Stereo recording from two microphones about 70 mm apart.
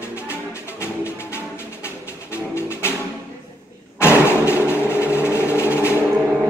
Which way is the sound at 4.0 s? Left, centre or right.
Left.